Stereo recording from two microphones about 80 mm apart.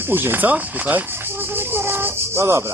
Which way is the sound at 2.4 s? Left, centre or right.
Right.